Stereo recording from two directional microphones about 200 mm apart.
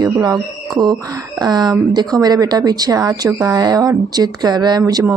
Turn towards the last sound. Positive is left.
turn(degrees=-15)  # may be behind; listen again after turning